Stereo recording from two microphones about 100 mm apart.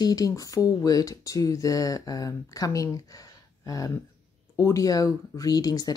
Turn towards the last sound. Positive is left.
turn(degrees=40)  # may be behind; listen again after turning